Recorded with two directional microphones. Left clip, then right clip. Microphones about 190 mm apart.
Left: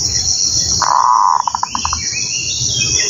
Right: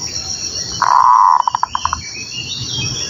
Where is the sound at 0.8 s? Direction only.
30° left (ahead or behind).